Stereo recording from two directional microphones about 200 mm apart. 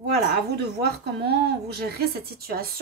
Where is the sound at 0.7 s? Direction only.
55° right (ahead or behind).